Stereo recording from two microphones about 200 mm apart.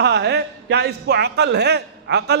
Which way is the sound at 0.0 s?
60° right (ahead or behind).